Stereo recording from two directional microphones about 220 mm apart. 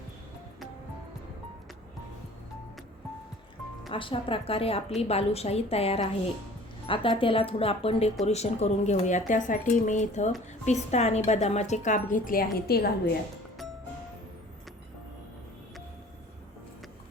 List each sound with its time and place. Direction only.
3.8 s a woman's voice: 25° left (ahead or behind); by 12.9 s 45° left (ahead or behind)